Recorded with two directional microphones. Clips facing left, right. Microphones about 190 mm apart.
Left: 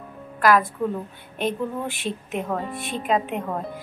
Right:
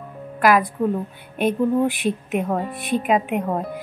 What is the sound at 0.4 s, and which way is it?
A woman's voice, 15° right (ahead or behind).